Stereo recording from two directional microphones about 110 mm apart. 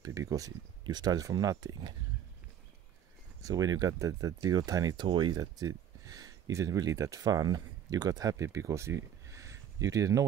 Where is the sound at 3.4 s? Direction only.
35° right (ahead or behind).